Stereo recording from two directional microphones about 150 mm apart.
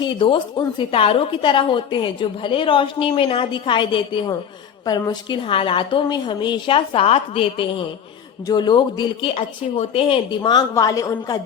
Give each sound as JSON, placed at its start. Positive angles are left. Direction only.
{"t": 0.0, "sound": "a woman's voice", "side_deg": 30}
{"t": 5.4, "sound": "a woman's voice", "side_deg": 35}